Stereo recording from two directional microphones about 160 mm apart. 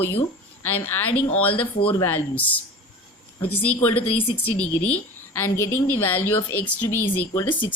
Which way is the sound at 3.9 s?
35° left (ahead or behind).